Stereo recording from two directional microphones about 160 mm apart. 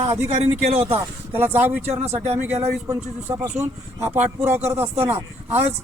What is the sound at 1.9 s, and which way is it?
Speech, 40° right (ahead or behind).